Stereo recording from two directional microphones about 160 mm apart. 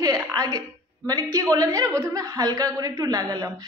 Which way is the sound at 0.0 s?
25° right (ahead or behind).